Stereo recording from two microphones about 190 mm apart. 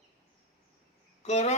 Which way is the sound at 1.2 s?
35° left (ahead or behind).